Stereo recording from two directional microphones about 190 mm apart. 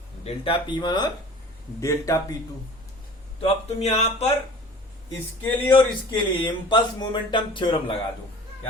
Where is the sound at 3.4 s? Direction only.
30° left (ahead or behind).